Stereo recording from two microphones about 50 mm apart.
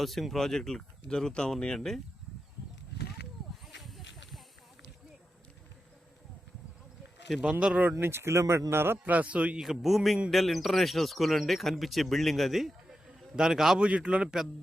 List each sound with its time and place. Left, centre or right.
0.0 s speech: centre
3.8 s a sound: centre
7.6 s speech: right
7.9 s speech: right
9.0 s speech: right
9.6 s speech: centre
13.7 s speech: centre